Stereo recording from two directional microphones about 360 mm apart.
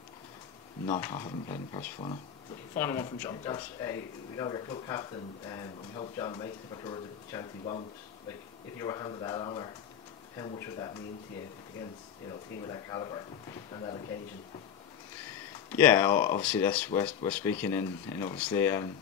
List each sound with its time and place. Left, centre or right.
0.8 s speech: centre
12.6 s speech: centre
15.7 s speech: centre